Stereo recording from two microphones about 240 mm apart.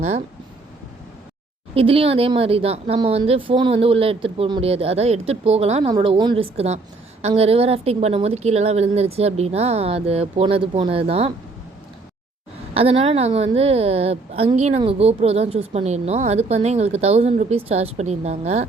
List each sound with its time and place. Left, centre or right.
0.0 s a woman's voice: right
1.7 s a woman's voice: right
12.7 s a woman's voice: right